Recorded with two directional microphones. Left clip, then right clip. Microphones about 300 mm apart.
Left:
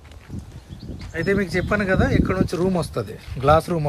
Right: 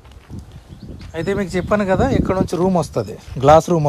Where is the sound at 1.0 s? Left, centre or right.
Centre.